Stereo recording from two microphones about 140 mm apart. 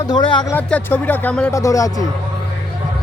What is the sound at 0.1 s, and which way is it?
Speech, 35° left (ahead or behind).